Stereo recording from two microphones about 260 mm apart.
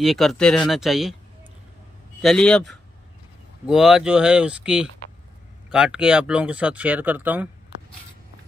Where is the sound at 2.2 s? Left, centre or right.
Centre.